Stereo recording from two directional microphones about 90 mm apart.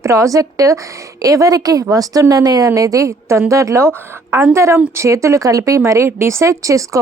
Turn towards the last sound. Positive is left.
turn(degrees=-35)  # may be behind; listen again after turning